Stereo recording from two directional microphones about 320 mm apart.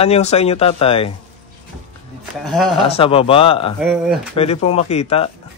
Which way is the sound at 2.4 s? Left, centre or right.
Centre.